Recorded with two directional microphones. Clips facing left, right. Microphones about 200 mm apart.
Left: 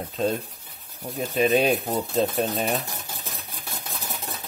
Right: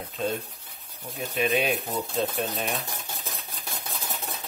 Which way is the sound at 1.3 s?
40° left (ahead or behind).